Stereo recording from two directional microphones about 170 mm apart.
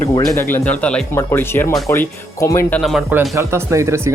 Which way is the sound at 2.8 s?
5° right (ahead or behind).